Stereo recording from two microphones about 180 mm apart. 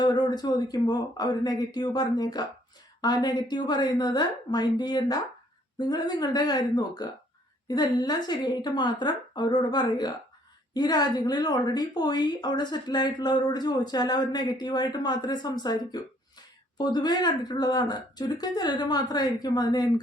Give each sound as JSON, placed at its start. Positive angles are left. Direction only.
{"t": 0.0, "sound": "a woman's voice", "side_deg": 25}